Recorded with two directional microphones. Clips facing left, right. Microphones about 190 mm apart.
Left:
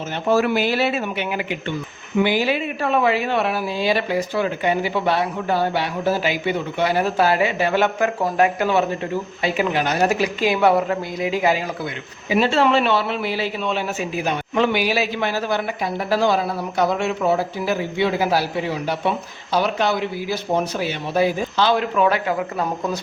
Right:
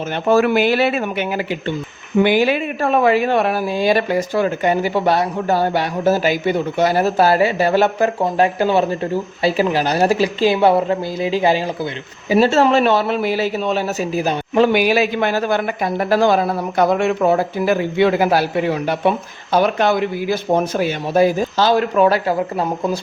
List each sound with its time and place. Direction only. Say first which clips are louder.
0.3 s speech: right 4 dB; 60° right (ahead or behind); by 11.6 s 30° right (ahead or behind)
12.3 s speech: right 4 dB; 40° right (ahead or behind)
14.7 s speech: right 5 dB; 50° right (ahead or behind)